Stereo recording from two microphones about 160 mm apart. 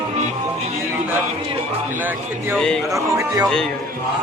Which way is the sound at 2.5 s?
5° left (ahead or behind).